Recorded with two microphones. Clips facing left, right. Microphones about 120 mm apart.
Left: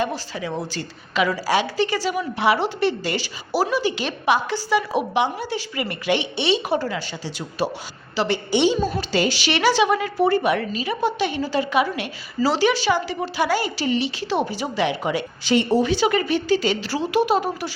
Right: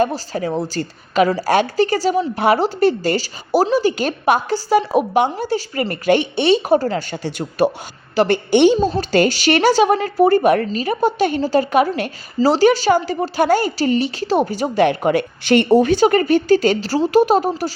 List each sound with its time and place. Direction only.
0.0 s a woman's voice: 45° right (ahead or behind)